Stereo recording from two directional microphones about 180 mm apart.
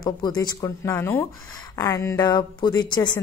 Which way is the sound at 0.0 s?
25° left (ahead or behind).